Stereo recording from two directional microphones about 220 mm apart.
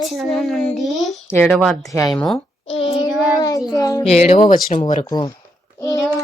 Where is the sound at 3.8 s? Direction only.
15° left (ahead or behind).